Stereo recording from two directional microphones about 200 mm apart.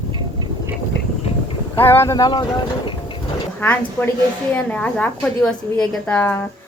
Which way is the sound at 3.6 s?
10° left (ahead or behind).